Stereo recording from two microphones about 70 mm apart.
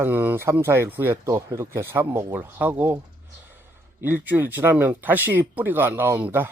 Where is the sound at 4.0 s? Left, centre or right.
Right.